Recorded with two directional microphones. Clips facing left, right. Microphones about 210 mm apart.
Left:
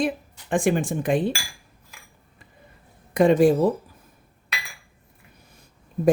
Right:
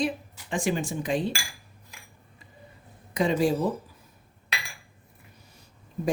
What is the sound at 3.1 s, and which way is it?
Speech, 55° left (ahead or behind).